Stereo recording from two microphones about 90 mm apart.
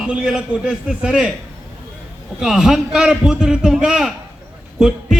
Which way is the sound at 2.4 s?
5° right (ahead or behind).